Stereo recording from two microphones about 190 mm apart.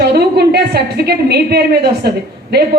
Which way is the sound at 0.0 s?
60° right (ahead or behind).